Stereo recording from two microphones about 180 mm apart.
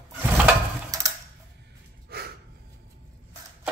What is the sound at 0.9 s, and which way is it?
Mechanisms, 20° right (ahead or behind).